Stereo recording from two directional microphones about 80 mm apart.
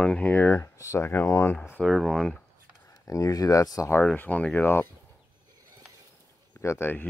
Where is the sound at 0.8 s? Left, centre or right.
Left.